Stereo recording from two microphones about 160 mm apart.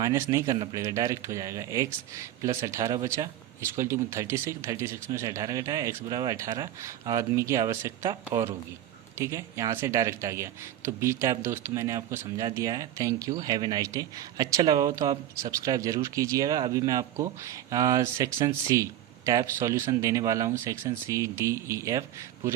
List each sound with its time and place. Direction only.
0.0 s speech: 20° right (ahead or behind)